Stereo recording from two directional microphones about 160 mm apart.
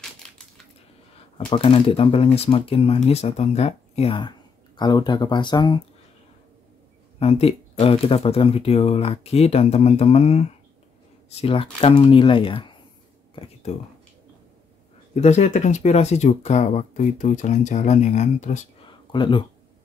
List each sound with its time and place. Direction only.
0.2 s crushing: 5° left (ahead or behind)
1.5 s speech: 35° left (ahead or behind)
7.2 s speech: 40° left (ahead or behind)
11.4 s speech: 30° left (ahead or behind)
13.3 s a sound: 40° left (ahead or behind)
15.1 s speech: 45° left (ahead or behind)
18.9 s a sound: 30° left (ahead or behind)